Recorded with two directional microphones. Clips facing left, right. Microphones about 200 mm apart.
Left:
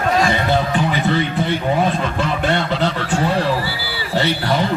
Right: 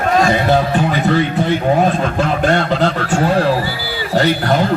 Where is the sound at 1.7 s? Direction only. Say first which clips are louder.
Right 4 dB; 45° right (ahead or behind).